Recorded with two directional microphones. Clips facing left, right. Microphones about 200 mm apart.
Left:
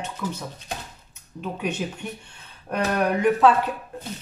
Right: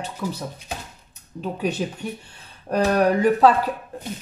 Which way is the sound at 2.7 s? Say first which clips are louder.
Right 4 dB; 35° right (ahead or behind).